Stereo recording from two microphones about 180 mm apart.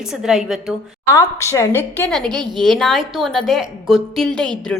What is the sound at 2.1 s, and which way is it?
A woman's voice, centre (ahead or behind).